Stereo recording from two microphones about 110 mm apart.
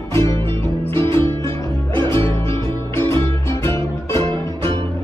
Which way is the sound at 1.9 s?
25° left (ahead or behind).